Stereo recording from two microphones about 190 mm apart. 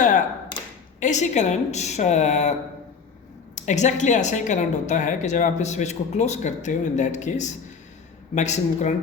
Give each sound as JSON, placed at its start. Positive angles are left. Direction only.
{"t": 0.9, "sound": "a woman's voice", "side_deg": 40}